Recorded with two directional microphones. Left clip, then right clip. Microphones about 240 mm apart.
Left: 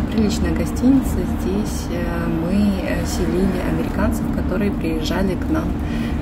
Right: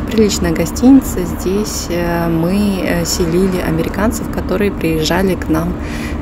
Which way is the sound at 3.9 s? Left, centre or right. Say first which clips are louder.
Right 5 dB; right.